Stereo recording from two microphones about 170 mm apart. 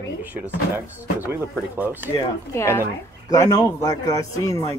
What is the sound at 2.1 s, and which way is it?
Speech, 15° left (ahead or behind).